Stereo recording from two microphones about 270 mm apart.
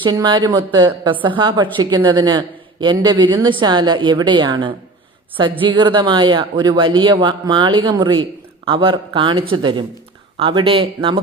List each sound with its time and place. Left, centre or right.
0.0 s speech: centre